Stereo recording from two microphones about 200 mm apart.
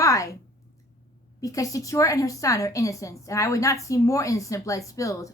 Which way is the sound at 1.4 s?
15° left (ahead or behind).